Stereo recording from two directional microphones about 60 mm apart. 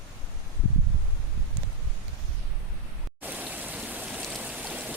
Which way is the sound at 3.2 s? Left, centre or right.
Right.